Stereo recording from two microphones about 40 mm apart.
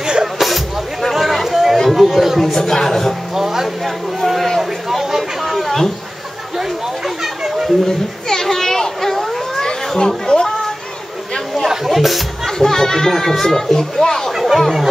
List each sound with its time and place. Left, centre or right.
0.0 s music: centre
1.1 s chatter: centre
1.9 s a sound: centre
2.5 s a sound: centre
3.3 s music: centre
3.8 s a sound: centre
7.4 s a sound: centre
8.3 s children playing: centre
9.7 s chatter: centre
11.6 s chatter: centre
12.5 s speech: centre
14.3 s chatter: centre